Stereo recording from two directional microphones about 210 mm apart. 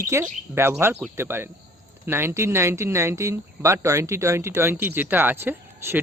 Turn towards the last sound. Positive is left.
turn(degrees=-10)  # may be behind; listen again after turning